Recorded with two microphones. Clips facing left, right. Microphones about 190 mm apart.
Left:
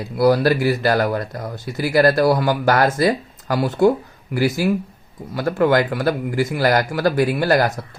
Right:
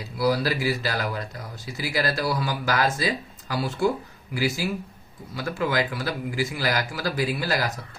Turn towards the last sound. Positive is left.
turn(degrees=60)  # may be behind; listen again after turning